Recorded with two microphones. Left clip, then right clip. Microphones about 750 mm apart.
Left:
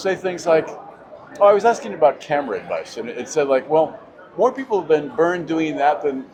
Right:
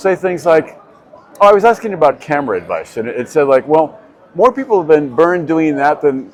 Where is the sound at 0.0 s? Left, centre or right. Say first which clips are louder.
Right 8 dB; right.